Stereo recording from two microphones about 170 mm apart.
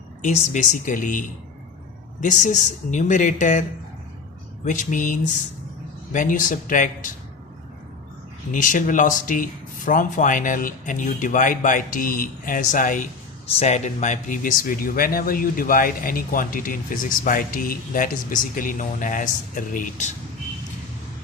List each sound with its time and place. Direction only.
0.2 s speech: 45° left (ahead or behind)
2.2 s speech: 45° left (ahead or behind)
4.6 s speech: 50° left (ahead or behind)
8.5 s speech: 50° left (ahead or behind)
13.5 s speech: 40° left (ahead or behind)